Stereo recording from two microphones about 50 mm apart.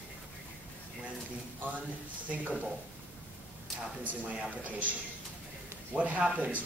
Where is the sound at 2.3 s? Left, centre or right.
Right.